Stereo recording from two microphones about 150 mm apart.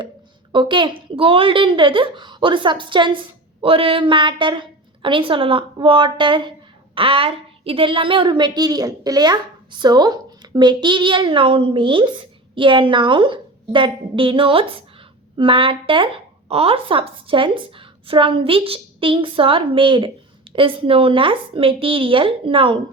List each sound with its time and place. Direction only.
0.5 s a woman's voice: 30° right (ahead or behind)